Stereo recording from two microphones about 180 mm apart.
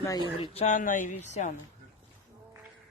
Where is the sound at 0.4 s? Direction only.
35° left (ahead or behind).